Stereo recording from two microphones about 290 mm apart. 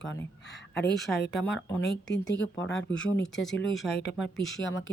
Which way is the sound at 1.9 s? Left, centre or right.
Left.